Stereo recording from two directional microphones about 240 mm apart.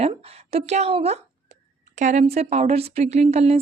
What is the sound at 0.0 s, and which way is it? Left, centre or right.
A woman's voice, right.